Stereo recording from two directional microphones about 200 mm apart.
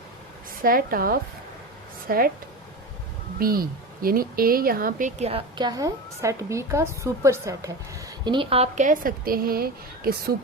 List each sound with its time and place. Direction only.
0.6 s speech: 45° right (ahead or behind)
3.3 s speech: 45° right (ahead or behind)
5.5 s a woman's voice: 20° right (ahead or behind); by 10.3 s 50° right (ahead or behind)